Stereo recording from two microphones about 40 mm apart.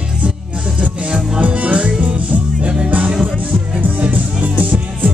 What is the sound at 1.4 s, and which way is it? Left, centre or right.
Music, right.